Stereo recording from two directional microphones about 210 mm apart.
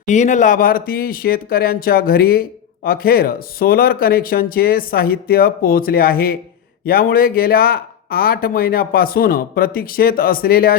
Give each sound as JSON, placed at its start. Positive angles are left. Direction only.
{"t": 0.0, "sound": "speech", "side_deg": 35}